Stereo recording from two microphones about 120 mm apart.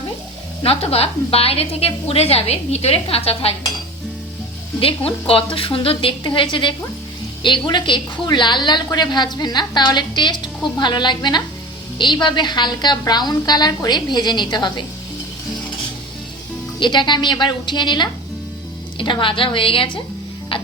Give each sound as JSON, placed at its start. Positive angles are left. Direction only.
{"t": 0.6, "sound": "a woman's voice", "side_deg": 55}
{"t": 4.8, "sound": "a woman's voice", "side_deg": 50}
{"t": 16.8, "sound": "a woman's voice", "side_deg": 40}
{"t": 20.5, "sound": "a sound", "side_deg": 50}